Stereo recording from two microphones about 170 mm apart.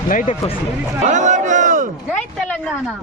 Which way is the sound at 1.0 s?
45° right (ahead or behind).